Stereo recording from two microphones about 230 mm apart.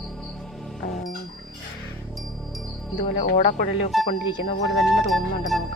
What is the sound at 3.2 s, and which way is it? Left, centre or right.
Speech, left.